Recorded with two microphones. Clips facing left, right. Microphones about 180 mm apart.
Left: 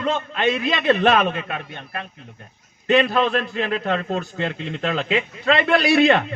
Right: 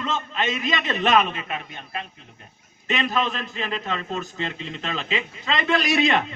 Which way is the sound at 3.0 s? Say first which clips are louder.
Left 6 dB; 60° left (ahead or behind).